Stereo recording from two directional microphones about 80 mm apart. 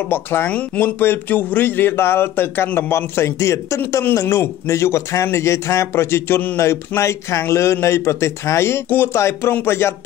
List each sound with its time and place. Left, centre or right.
0.1 s speech: left